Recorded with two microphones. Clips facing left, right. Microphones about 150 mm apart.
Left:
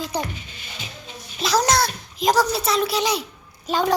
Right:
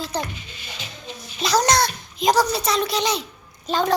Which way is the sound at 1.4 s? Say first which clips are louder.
Right 1 dB; centre (ahead or behind).